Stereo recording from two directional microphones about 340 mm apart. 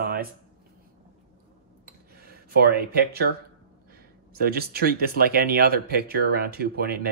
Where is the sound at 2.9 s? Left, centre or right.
Right.